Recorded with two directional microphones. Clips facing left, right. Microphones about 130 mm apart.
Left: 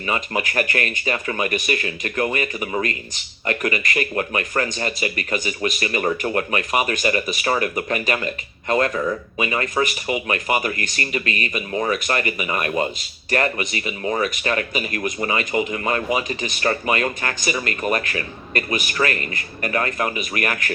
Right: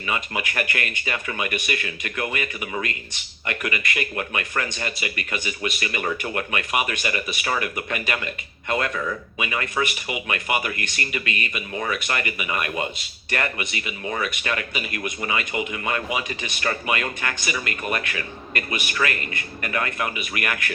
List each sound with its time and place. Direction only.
0.1 s speech: 35° left (ahead or behind)